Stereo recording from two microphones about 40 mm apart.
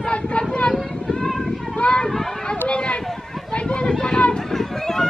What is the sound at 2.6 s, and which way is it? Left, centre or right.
Speech, left.